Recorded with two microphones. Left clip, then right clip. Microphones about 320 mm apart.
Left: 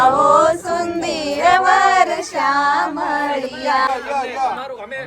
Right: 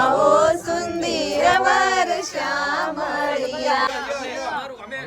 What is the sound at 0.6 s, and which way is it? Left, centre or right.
Child singing, centre.